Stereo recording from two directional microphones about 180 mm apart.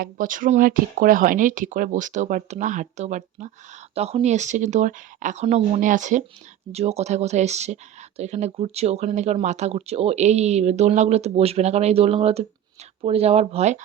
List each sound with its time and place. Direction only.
0.0 s speech: 50° right (ahead or behind)